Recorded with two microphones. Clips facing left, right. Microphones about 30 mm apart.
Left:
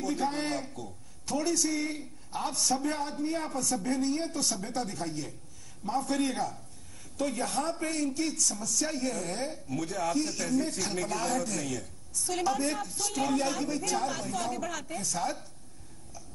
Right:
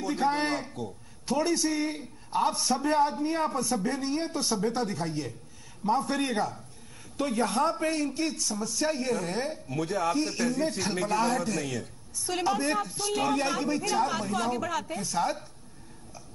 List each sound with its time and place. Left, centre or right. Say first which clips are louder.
0.0 s a man's voice: right 4 dB; right